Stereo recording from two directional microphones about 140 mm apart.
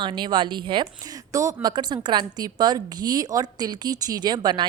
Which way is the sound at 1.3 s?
25° right (ahead or behind).